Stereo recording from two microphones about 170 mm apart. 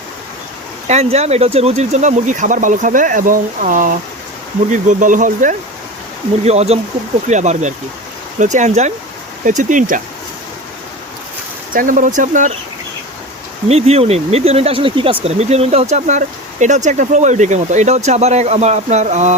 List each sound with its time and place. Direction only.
0.9 s speech: 40° right (ahead or behind)
6.4 s speech: 40° right (ahead or behind)
11.7 s speech: 55° right (ahead or behind)
13.7 s speech: 40° right (ahead or behind)